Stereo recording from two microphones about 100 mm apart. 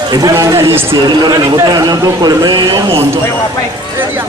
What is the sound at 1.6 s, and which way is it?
A man's voice, 40° right (ahead or behind).